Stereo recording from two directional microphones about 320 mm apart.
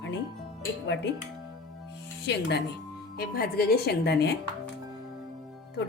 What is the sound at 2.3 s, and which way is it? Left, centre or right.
Speech, left.